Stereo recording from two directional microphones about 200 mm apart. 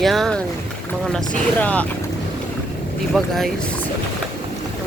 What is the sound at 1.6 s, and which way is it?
Speech, 5° left (ahead or behind).